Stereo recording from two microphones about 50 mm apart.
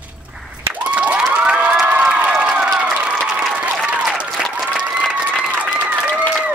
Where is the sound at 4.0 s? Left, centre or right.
Right.